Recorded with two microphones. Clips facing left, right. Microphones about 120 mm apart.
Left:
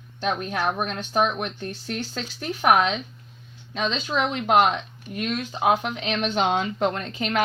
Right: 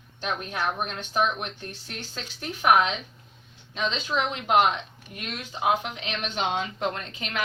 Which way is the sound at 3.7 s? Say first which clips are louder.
Left 2 dB; 50° left (ahead or behind).